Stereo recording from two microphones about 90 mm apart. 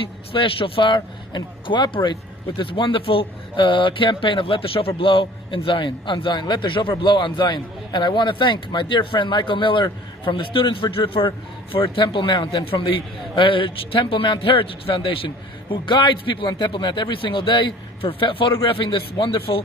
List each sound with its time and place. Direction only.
0.3 s a man's voice: 90° left